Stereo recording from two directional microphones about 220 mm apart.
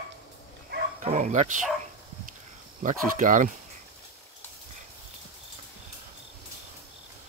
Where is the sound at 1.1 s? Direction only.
30° right (ahead or behind).